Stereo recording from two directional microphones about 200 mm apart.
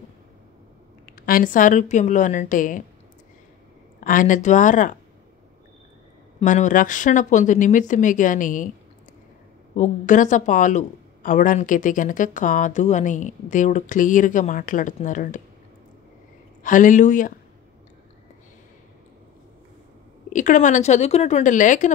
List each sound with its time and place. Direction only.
1.2 s speech: 45° left (ahead or behind)
4.0 s speech: 40° left (ahead or behind)
6.4 s speech: 40° left (ahead or behind)
9.8 s speech: 40° left (ahead or behind)
16.6 s speech: 40° left (ahead or behind)
20.3 s speech: 40° left (ahead or behind)